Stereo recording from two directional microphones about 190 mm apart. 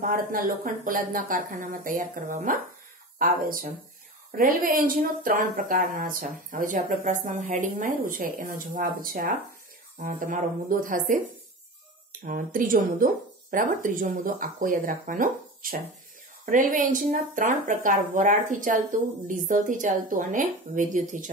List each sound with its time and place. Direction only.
0.0 s speech: 45° right (ahead or behind)
4.4 s speech: 45° right (ahead or behind)
12.3 s speech: 45° right (ahead or behind)